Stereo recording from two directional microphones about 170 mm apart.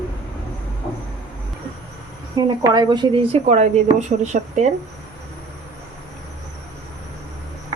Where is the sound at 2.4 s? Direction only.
25° right (ahead or behind); by 4.7 s 40° right (ahead or behind).